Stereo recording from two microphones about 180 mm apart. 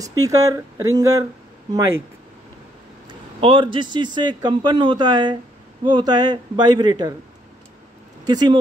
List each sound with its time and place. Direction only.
0.0 s a man's voice: 20° right (ahead or behind)
3.1 s a man's voice: 30° right (ahead or behind)
8.3 s a man's voice: 25° right (ahead or behind)